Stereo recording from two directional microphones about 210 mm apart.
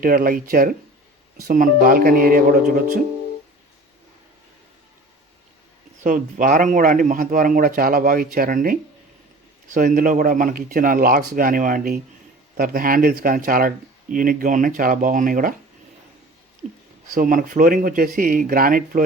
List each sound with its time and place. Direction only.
0.0 s speech: 40° right (ahead or behind)
6.0 s speech: 35° right (ahead or behind)
17.2 s speech: 40° right (ahead or behind)